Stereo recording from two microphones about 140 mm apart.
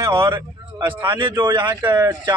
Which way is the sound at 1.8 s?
15° right (ahead or behind).